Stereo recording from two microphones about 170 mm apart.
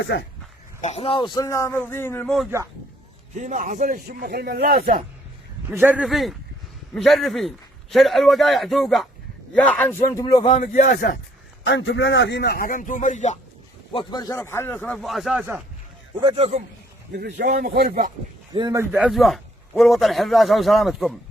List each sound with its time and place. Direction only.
0.0 s speech: 90° left
0.8 s speech: 40° left (ahead or behind); by 2.2 s 15° left (ahead or behind)
2.2 s a man's voice: centre (ahead or behind)
3.3 s a man's voice: 45° right (ahead or behind); by 4.9 s 65° right (ahead or behind)
5.7 s a man's voice: 10° right (ahead or behind); by 10.5 s 20° left (ahead or behind)
10.5 s a man's voice: 55° left (ahead or behind)
11.6 s a man's voice: 90° left; by 13.4 s 45° left (ahead or behind)
13.9 s speech: 25° left (ahead or behind); by 15.4 s centre (ahead or behind)
16.2 s a man's voice: 35° right (ahead or behind)
17.1 s a man's voice: 90° right
17.3 s a man's voice: 65° right (ahead or behind)
18.5 s speech: 25° right (ahead or behind)
18.8 s a man's voice: 10° right (ahead or behind)